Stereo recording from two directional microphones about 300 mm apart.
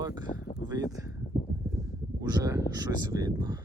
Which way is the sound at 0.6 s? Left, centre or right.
Centre.